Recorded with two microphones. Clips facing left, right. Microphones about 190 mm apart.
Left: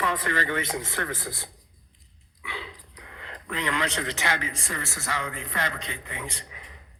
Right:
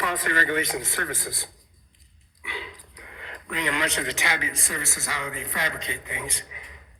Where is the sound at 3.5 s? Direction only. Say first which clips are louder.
Right 1 dB; 15° right (ahead or behind).